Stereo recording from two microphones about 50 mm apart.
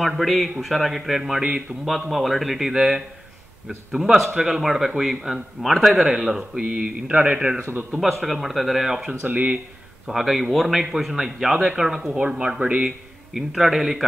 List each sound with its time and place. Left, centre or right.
0.0 s speech: centre
6.6 s a man's voice: right
8.0 s speech: centre
9.2 s speech: right
10.0 s a man's voice: centre
13.3 s speech: centre